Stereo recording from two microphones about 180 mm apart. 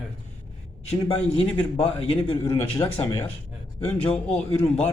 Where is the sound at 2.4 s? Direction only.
15° left (ahead or behind).